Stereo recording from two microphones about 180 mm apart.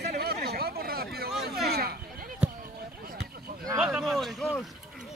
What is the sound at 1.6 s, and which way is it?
Sheep, 60° right (ahead or behind).